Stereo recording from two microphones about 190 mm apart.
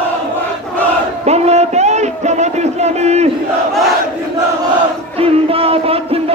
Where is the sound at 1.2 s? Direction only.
35° right (ahead or behind).